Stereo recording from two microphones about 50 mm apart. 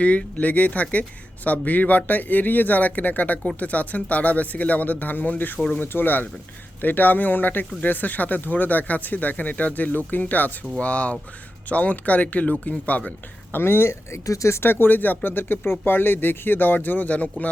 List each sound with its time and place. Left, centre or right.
0.0 s speech: left
13.5 s speech: left
14.6 s speech: left